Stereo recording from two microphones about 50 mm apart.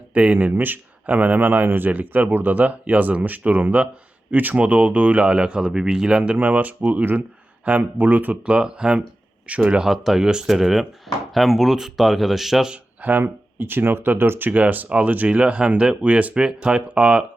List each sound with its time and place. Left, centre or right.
0.1 s speech: right
6.3 s speech: right
8.5 s speech: centre
9.9 s speech: centre
12.7 s speech: right